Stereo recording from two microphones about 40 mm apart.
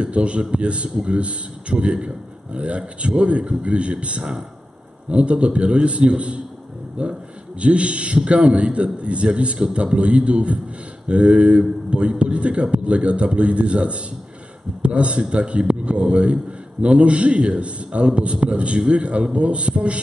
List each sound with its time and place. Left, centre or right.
0.0 s a man's voice: right
5.1 s a man's voice: right